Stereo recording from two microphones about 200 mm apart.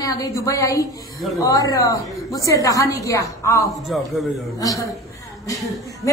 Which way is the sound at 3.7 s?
Centre (ahead or behind).